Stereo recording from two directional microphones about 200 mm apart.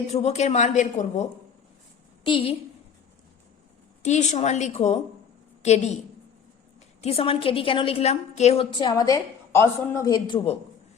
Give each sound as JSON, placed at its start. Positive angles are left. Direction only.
{"t": 0.1, "sound": "a woman's voice", "side_deg": 35}
{"t": 2.2, "sound": "a woman's voice", "side_deg": 25}
{"t": 4.0, "sound": "a woman's voice", "side_deg": 35}
{"t": 7.0, "sound": "a woman's voice", "side_deg": 30}